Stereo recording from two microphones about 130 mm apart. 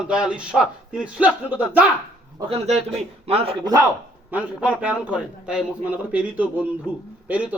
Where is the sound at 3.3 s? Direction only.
50° right (ahead or behind).